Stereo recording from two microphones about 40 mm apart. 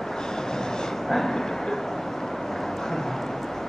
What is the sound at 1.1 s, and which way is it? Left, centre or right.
Speech, centre.